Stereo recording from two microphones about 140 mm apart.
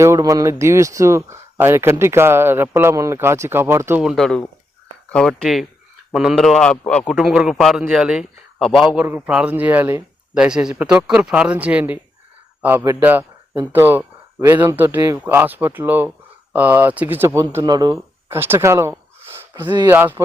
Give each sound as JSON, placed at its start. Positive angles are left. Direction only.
{"t": 0.0, "sound": "speech", "side_deg": -20}
{"t": 4.0, "sound": "a man's voice", "side_deg": 0}
{"t": 15.2, "sound": "a man's voice", "side_deg": -15}
{"t": 18.3, "sound": "a man's voice", "side_deg": -15}